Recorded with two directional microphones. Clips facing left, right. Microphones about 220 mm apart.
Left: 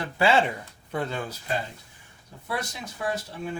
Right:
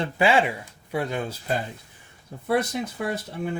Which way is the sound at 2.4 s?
55° right (ahead or behind).